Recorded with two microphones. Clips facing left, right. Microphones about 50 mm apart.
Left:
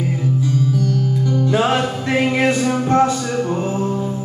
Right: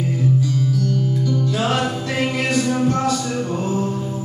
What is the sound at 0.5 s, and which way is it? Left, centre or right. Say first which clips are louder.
Music: left 2 dB; left.